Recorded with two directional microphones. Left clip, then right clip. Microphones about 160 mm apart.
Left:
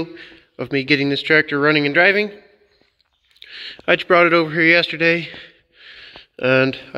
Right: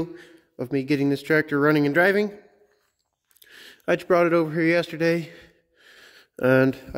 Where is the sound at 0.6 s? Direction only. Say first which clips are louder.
Left 6 dB; 10° right (ahead or behind); by 2.1 s 30° right (ahead or behind).